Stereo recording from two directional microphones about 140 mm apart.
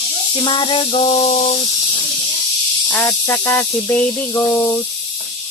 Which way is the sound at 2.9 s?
15° left (ahead or behind).